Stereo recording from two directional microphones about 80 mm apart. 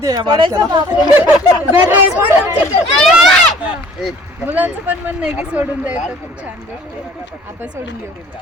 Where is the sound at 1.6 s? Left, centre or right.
Right.